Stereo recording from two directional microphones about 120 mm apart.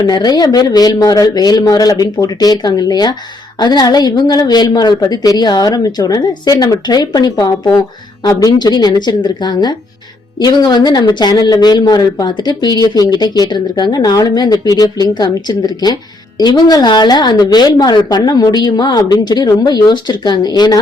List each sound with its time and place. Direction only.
0.0 s speech: 35° left (ahead or behind)